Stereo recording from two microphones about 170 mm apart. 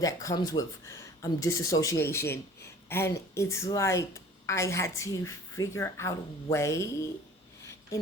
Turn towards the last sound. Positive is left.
turn(degrees=20)  # may be behind; listen again after turning